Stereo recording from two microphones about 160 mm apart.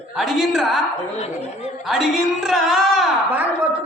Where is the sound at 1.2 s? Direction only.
40° left (ahead or behind).